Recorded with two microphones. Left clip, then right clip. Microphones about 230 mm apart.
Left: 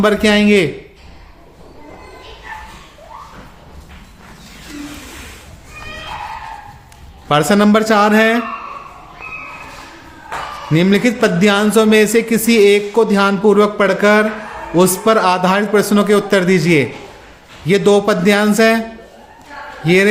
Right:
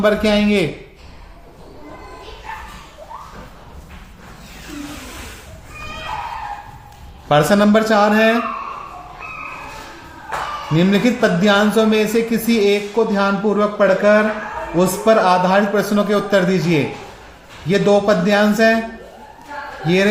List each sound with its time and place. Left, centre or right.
0.0 s speech: left
7.3 s speech: left
10.8 s speech: left
19.8 s a man's voice: left